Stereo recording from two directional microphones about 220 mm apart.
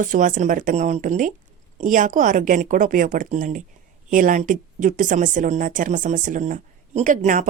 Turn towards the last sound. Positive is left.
turn(degrees=-35)  # may be behind; listen again after turning